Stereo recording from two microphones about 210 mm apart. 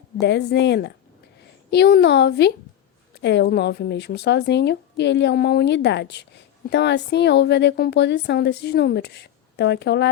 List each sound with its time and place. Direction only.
0.2 s speech: 55° left (ahead or behind)